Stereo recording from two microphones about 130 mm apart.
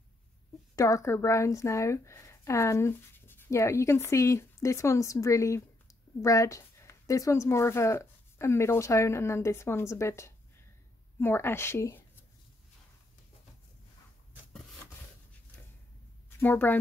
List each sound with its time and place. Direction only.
0.7 s a woman's voice: 25° left (ahead or behind)
16.3 s a woman's voice: 15° left (ahead or behind)